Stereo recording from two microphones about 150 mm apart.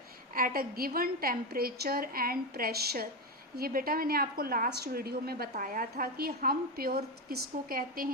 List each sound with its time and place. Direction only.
0.3 s a woman's voice: 75° right (ahead or behind)